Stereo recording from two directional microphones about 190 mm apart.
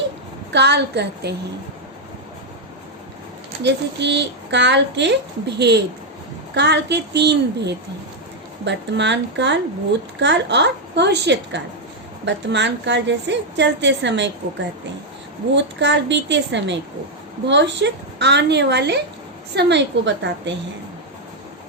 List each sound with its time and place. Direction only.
0.5 s a woman's voice: 65° right (ahead or behind)
3.6 s a woman's voice: 65° right (ahead or behind)
15.5 s a woman's voice: 65° right (ahead or behind)